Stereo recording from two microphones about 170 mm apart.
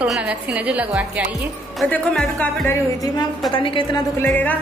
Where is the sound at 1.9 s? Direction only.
5° left (ahead or behind).